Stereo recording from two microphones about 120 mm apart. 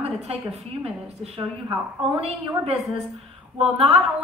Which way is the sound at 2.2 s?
55° right (ahead or behind).